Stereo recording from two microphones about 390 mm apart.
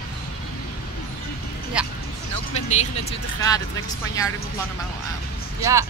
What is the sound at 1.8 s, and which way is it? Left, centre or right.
Vehicle, centre.